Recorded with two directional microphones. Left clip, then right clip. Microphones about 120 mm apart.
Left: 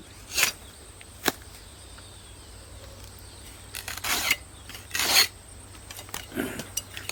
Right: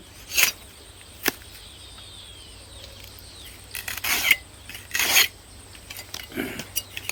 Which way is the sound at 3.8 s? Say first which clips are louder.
Right 4 dB; 5° left (ahead or behind).